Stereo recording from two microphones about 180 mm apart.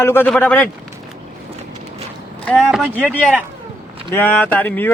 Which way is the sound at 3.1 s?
5° left (ahead or behind).